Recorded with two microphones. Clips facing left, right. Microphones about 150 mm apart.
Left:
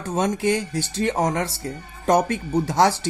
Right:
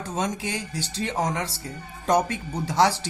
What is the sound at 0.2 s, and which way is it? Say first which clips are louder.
Speech: left 8 dB; 50° left (ahead or behind).